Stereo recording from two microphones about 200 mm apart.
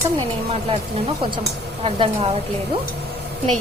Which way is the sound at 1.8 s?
30° right (ahead or behind).